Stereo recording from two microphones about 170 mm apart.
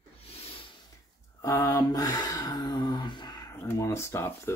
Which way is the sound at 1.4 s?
20° left (ahead or behind).